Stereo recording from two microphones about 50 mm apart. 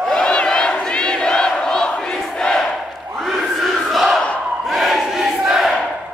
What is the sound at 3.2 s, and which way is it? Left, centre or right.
Crowd, centre.